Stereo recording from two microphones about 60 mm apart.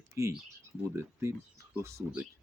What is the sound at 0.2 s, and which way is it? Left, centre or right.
Speech, right.